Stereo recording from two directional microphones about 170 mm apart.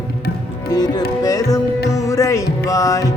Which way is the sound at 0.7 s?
25° left (ahead or behind).